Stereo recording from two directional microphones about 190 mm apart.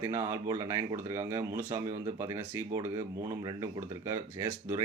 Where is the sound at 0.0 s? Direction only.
15° right (ahead or behind).